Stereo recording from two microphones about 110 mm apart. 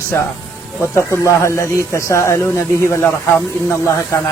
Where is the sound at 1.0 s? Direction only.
25° left (ahead or behind).